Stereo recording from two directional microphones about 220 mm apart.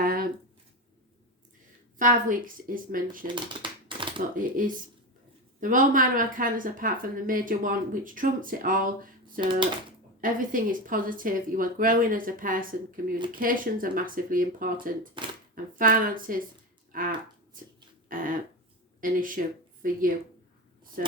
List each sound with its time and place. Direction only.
0.0 s a sound: 40° right (ahead or behind)
2.0 s a woman's voice: 35° right (ahead or behind)
3.3 s shuffling cards: 20° right (ahead or behind)
4.4 s a woman's voice: 40° right (ahead or behind)
15.2 s speech: 20° right (ahead or behind)
15.7 s a woman's voice: 40° right (ahead or behind)